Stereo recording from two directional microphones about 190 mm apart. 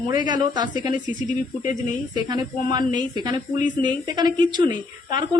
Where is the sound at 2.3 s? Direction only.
20° right (ahead or behind).